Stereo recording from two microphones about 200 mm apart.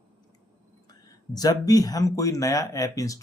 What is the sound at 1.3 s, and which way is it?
Speech, 20° left (ahead or behind).